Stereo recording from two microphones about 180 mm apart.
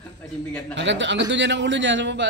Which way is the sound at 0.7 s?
85° right.